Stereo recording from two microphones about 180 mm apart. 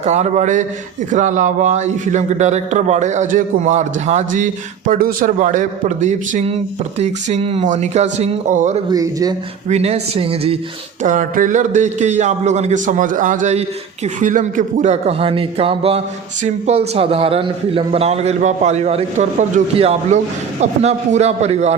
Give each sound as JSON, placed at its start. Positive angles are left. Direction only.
{"t": 0.0, "sound": "a man's voice", "side_deg": -40}
{"t": 8.9, "sound": "a man's voice", "side_deg": -20}
{"t": 9.6, "sound": "a man's voice", "side_deg": -35}
{"t": 11.0, "sound": "a man's voice", "side_deg": -45}